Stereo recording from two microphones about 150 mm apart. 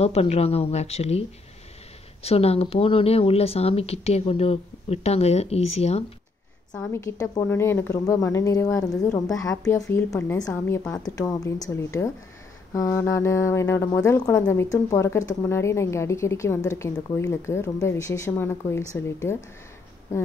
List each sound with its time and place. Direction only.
0.0 s speech: 45° left (ahead or behind)
2.2 s speech: 40° left (ahead or behind)
6.8 s a woman's voice: 20° left (ahead or behind)